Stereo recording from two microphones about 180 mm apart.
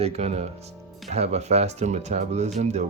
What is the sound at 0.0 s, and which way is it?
Speech, 35° right (ahead or behind).